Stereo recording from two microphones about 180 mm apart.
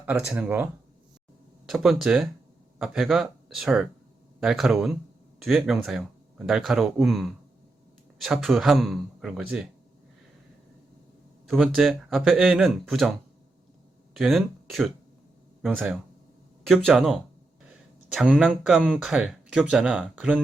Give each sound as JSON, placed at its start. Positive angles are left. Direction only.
{"t": 0.0, "sound": "speech", "side_deg": -5}
{"t": 11.4, "sound": "speech", "side_deg": 0}